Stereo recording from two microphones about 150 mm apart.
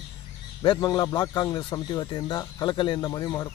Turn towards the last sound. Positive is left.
turn(degrees=25)  # may be behind; listen again after turning